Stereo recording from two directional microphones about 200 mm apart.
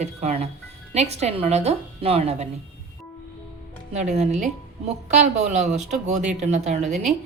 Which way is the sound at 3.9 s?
35° right (ahead or behind).